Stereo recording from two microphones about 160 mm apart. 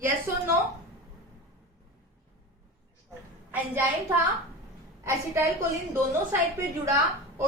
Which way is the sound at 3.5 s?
10° right (ahead or behind).